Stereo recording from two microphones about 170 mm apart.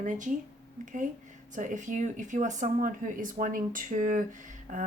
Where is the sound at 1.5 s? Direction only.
45° right (ahead or behind).